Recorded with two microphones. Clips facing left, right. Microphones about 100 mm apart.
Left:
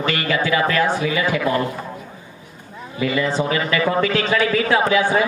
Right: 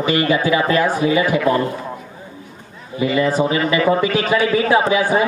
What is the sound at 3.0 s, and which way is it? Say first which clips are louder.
A man's voice: right 4 dB; 20° right (ahead or behind).